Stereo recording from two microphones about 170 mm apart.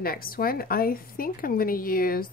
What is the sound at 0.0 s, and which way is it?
Speech, 60° left (ahead or behind).